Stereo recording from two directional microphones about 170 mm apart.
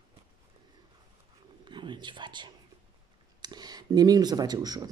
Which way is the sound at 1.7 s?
25° right (ahead or behind).